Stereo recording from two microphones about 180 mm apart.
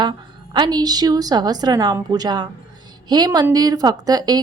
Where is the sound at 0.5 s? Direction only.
25° right (ahead or behind).